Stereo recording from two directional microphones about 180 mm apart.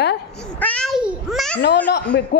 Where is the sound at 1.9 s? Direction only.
70° left (ahead or behind).